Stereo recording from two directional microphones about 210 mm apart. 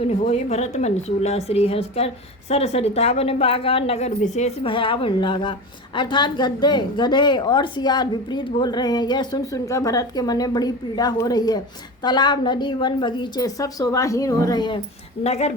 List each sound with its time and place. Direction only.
0.1 s a woman's voice: 30° left (ahead or behind)
15.2 s a woman's voice: 30° left (ahead or behind)